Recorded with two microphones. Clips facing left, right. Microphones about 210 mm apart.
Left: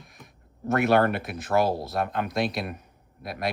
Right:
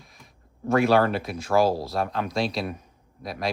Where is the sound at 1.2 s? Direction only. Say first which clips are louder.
Right 3 dB; 30° right (ahead or behind).